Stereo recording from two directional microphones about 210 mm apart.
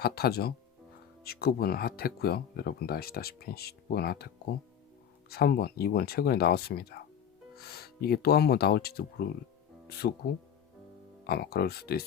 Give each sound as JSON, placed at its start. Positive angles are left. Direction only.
{"t": 0.0, "sound": "speech", "side_deg": 50}
{"t": 5.3, "sound": "speech", "side_deg": 45}